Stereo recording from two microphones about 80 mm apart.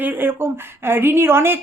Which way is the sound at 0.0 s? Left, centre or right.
Right.